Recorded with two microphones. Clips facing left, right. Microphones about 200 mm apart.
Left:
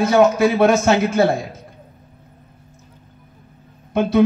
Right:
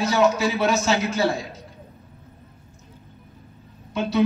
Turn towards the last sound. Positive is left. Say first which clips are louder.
# left 6 dB
turn(degrees=55)  # may be behind; listen again after turning